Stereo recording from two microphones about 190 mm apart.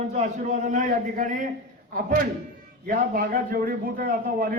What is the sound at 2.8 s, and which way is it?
A man's voice, 45° right (ahead or behind).